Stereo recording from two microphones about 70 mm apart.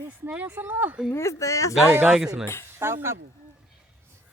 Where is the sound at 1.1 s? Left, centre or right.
Left.